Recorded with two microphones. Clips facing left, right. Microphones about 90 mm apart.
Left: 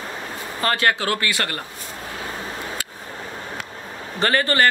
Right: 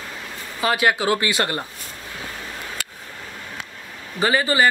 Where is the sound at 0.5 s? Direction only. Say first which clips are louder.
Right 1 dB; 10° right (ahead or behind).